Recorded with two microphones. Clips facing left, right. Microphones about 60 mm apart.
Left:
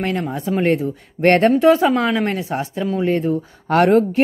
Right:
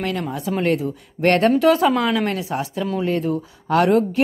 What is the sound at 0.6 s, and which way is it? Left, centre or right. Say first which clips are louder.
Speech: left 3 dB; left.